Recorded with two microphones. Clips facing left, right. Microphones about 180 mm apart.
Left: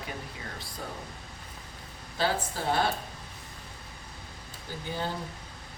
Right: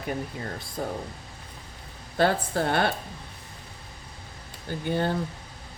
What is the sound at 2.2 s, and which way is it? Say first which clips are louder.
Speech: right 6 dB; 65° right (ahead or behind).